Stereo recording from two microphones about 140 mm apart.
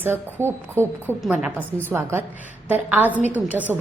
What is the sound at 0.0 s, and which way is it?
A woman's voice, 15° right (ahead or behind).